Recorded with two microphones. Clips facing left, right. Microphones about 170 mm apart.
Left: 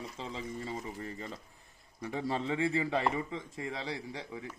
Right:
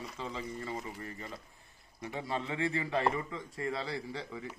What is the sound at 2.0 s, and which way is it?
A man's voice, 35° left (ahead or behind).